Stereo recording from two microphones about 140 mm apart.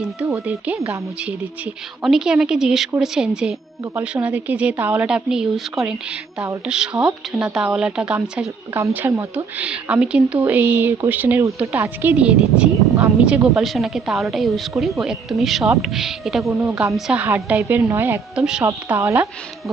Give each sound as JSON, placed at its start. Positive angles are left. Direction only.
{"t": 0.6, "sound": "a woman's voice", "side_deg": -10}
{"t": 18.3, "sound": "a woman's voice", "side_deg": -5}
{"t": 18.6, "sound": "speech", "side_deg": -20}